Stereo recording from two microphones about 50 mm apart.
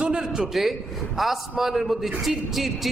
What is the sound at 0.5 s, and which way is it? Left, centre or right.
A man's voice, centre.